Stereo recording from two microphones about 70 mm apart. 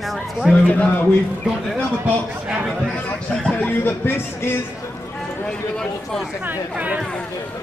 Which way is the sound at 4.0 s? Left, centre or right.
Left.